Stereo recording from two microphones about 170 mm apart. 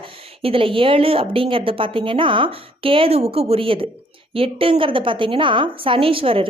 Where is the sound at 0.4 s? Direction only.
30° right (ahead or behind).